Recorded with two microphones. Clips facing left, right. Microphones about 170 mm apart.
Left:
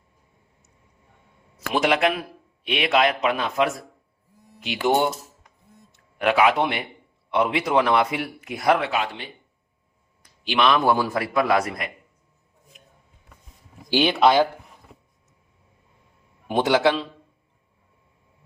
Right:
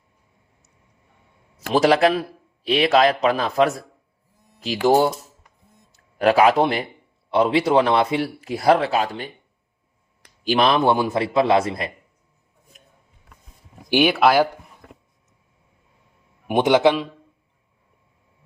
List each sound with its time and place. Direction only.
1.7 s speech: 35° right (ahead or behind)
4.9 s a man's voice: 35° right (ahead or behind)
10.4 s speech: 40° right (ahead or behind)
10.8 s speech: 20° right (ahead or behind)
13.9 s a man's voice: 10° right (ahead or behind)
14.8 s vehicle: 90° right
16.5 s a man's voice: 20° right (ahead or behind)